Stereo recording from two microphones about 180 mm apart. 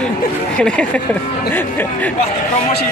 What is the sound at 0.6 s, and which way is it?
Speech, 5° left (ahead or behind).